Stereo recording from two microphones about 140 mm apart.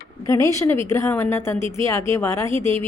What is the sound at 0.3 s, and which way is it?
A woman's voice, 25° left (ahead or behind).